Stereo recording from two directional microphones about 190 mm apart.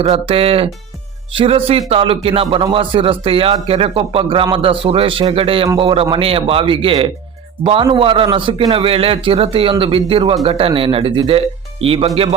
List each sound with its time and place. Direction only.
0.0 s a man's voice: 30° right (ahead or behind)